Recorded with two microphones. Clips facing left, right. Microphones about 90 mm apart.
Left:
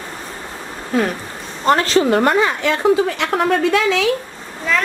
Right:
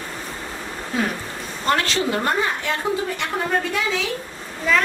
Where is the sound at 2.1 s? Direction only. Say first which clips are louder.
Left 7 dB; 85° left.